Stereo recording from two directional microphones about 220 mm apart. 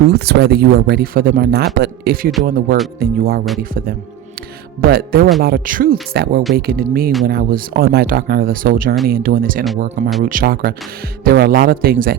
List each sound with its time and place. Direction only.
0.1 s speech: 45° right (ahead or behind)